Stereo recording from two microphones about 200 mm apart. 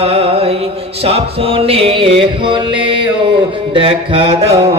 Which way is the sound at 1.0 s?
30° right (ahead or behind).